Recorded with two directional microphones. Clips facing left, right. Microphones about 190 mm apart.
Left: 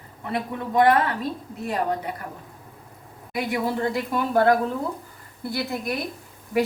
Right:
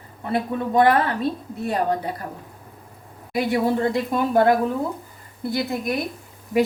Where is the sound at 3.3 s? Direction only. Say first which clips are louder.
Right 5 dB; 25° right (ahead or behind).